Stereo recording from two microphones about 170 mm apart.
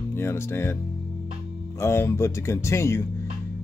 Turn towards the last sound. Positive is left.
turn(degrees=15)  # may be behind; listen again after turning